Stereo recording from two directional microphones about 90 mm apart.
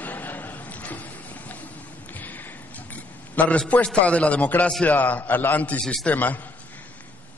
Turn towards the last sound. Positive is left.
turn(degrees=20)  # may be behind; listen again after turning